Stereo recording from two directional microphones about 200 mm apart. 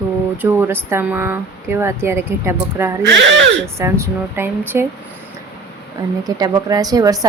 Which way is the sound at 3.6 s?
15° right (ahead or behind).